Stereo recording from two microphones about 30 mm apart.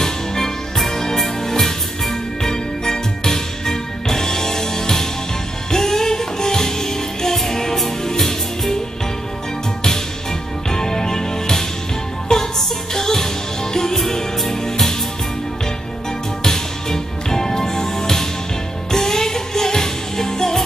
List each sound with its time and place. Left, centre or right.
0.0 s music: centre
10.7 s music: centre
16.4 s music: centre